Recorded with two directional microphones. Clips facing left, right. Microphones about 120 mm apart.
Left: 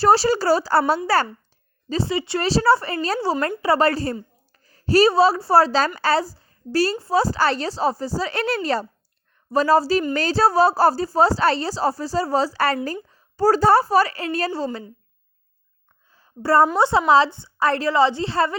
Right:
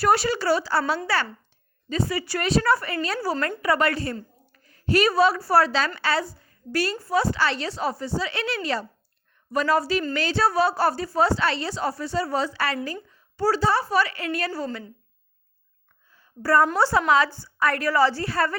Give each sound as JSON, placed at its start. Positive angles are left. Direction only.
{"t": 0.0, "sound": "a woman's voice", "side_deg": 30}
{"t": 1.9, "sound": "a woman's voice", "side_deg": 25}
{"t": 13.9, "sound": "a woman's voice", "side_deg": 35}
{"t": 16.1, "sound": "a sound", "side_deg": 30}
{"t": 16.7, "sound": "a woman's voice", "side_deg": 20}